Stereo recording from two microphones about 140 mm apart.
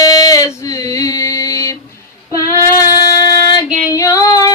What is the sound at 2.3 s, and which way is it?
Child singing, 25° left (ahead or behind).